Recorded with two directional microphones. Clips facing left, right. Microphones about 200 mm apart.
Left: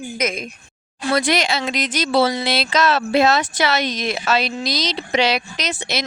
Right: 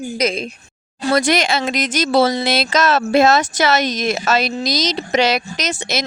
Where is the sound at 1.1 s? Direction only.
45° right (ahead or behind).